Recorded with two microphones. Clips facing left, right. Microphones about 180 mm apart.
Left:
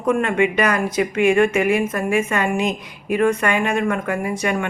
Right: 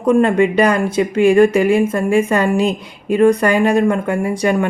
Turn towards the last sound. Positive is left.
turn(degrees=-30)  # may be behind; listen again after turning